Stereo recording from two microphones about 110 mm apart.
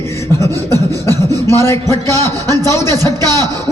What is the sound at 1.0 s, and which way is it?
A man's voice, 25° left (ahead or behind).